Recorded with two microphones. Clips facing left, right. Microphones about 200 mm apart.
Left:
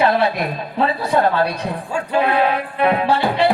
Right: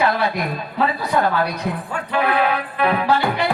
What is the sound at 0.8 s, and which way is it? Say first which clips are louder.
Speech: left 2 dB; 30° left (ahead or behind).